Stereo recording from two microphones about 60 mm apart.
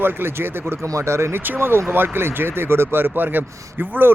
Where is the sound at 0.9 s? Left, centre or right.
Right.